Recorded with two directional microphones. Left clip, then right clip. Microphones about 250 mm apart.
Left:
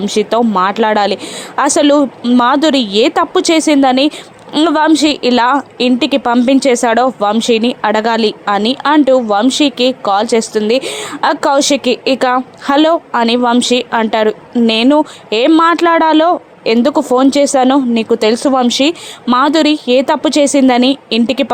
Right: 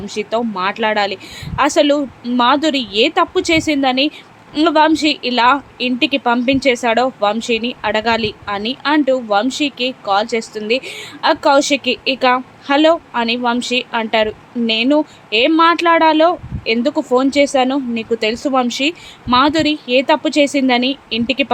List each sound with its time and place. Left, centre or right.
0.0 s a woman's voice: left